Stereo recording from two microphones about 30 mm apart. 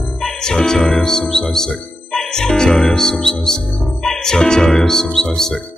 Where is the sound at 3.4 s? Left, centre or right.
Centre.